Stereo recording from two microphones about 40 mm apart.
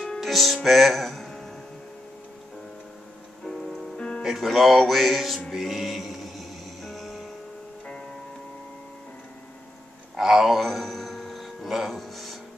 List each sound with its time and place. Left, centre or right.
0.2 s music: centre
3.4 s music: centre
4.2 s speech: centre
5.5 s music: centre
10.1 s a sound: centre
11.9 s music: centre